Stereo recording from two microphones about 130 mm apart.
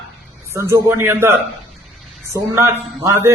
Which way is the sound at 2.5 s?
20° right (ahead or behind).